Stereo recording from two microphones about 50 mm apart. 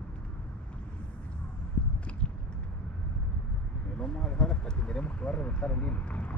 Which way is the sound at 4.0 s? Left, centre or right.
Centre.